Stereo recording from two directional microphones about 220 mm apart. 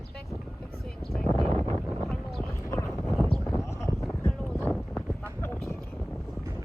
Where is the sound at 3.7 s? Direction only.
15° left (ahead or behind).